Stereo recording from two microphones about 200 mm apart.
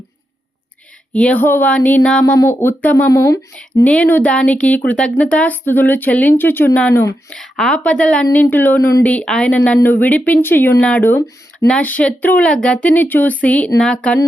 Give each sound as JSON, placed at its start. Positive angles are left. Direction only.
{"t": 1.1, "sound": "speech", "side_deg": 5}